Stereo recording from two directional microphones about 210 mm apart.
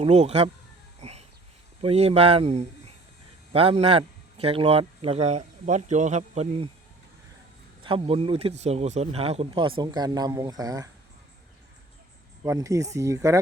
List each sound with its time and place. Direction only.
0.0 s speech: 30° right (ahead or behind)
1.0 s a sound: 30° right (ahead or behind)
1.8 s a man's voice: 30° right (ahead or behind)
7.9 s speech: 25° right (ahead or behind)
12.5 s speech: 15° right (ahead or behind)